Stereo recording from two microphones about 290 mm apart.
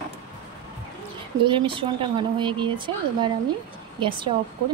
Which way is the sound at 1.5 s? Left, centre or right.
Centre.